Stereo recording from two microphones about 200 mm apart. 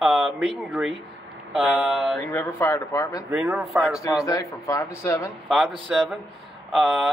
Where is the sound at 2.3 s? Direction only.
10° left (ahead or behind).